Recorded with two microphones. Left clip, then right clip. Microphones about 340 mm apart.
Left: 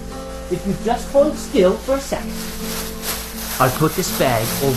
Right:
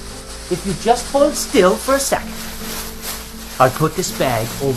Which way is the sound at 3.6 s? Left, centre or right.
Centre.